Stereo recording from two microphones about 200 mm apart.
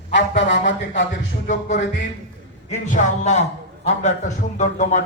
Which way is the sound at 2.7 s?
40° left (ahead or behind).